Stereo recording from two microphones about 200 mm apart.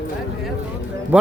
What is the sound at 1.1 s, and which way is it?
Speech, 5° right (ahead or behind).